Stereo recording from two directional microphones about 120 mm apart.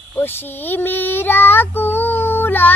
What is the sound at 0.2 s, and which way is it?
Child singing, 15° left (ahead or behind).